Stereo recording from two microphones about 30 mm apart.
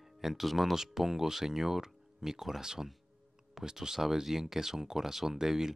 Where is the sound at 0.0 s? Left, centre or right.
Centre.